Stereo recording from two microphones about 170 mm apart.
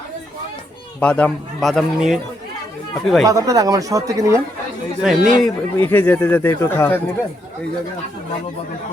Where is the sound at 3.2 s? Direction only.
20° right (ahead or behind).